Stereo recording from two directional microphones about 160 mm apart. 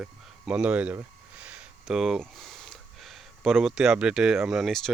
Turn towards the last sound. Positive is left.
turn(degrees=0)  # may be behind; listen again after turning